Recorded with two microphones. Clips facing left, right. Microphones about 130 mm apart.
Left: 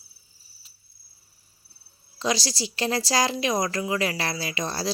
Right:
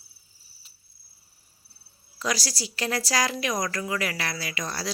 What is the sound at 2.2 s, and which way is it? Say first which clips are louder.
Speech: left 3 dB; 25° left (ahead or behind).